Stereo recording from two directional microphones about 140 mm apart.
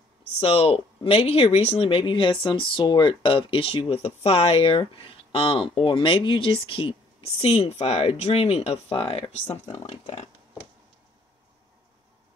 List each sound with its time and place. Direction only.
0.4 s speech: 45° left (ahead or behind)